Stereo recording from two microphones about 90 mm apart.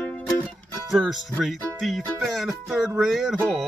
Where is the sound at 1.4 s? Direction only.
Centre (ahead or behind).